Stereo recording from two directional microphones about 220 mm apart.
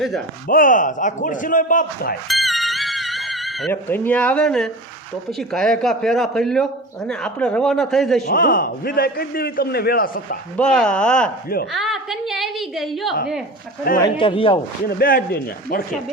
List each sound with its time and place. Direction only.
0.4 s speech: 40° left (ahead or behind)
2.2 s music: centre (ahead or behind)
3.7 s speech: 10° left (ahead or behind)
8.3 s a man's voice: 40° left (ahead or behind)
10.6 s speech: 5° left (ahead or behind)
11.7 s a sound: centre (ahead or behind)
14.0 s a man's voice: 25° left (ahead or behind)
14.8 s a man's voice: 40° left (ahead or behind)